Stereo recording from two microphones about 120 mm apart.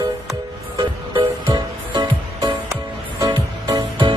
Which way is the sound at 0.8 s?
40° right (ahead or behind).